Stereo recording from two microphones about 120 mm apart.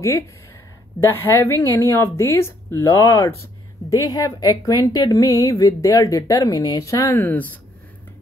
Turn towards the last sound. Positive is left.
turn(degrees=15)  # may be behind; listen again after turning